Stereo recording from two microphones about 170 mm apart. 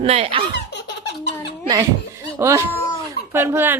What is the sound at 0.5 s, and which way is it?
Laughter, 85° left.